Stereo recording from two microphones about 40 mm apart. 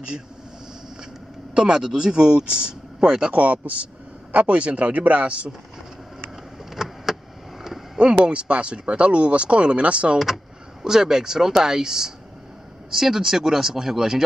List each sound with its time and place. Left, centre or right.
1.5 s speech: right
3.3 s speech: right
6.7 s vehicle: centre
7.6 s a sound: centre
8.0 s speech: right
10.1 s speech: centre